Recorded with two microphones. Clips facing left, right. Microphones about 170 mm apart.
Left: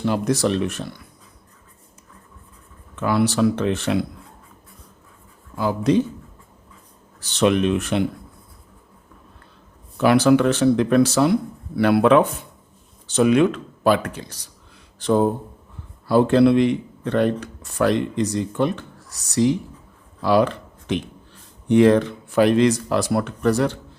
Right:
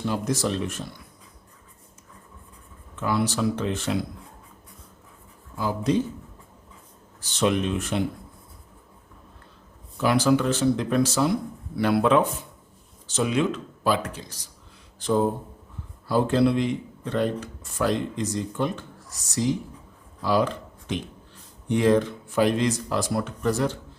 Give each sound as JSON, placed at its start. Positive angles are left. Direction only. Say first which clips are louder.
{"t": 0.0, "sound": "speech", "louder": "left 5 dB", "side_deg": 70}
{"t": 2.9, "sound": "speech", "louder": "left 5 dB", "side_deg": 70}
{"t": 5.5, "sound": "speech", "louder": "left 5 dB", "side_deg": 70}
{"t": 7.2, "sound": "speech", "louder": "left 5 dB", "side_deg": 70}
{"t": 10.0, "sound": "speech", "louder": "left 6 dB", "side_deg": 65}